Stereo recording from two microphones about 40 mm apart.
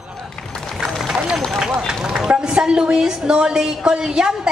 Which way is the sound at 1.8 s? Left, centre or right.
Centre.